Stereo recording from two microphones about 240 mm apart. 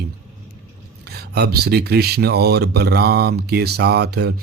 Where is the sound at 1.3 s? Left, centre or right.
Right.